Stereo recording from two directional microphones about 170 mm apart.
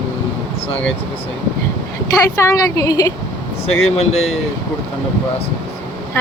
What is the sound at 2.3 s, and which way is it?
Speech, 15° left (ahead or behind).